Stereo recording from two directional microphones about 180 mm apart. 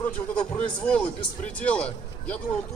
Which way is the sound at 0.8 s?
5° left (ahead or behind).